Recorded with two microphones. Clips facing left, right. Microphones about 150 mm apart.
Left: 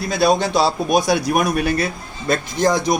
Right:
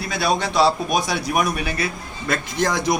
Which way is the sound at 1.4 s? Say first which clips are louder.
Left 4 dB; 45° left (ahead or behind).